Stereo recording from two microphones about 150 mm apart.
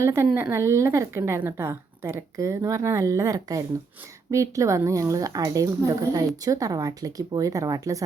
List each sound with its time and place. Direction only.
0.0 s a woman's voice: 20° right (ahead or behind)